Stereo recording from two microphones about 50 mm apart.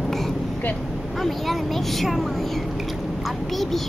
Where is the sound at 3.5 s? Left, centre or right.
Centre.